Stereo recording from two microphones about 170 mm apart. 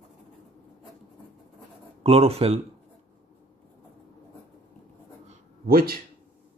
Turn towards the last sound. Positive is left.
turn(degrees=-60)  # may be behind; listen again after turning